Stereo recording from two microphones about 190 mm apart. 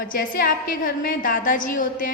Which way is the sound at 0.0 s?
50° left (ahead or behind).